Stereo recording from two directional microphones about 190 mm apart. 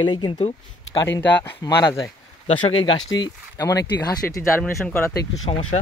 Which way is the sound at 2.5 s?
30° left (ahead or behind).